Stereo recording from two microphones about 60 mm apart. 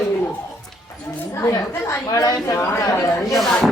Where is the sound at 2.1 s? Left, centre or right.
Left.